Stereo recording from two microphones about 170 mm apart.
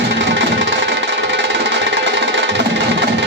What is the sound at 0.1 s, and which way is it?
Music, 90° right.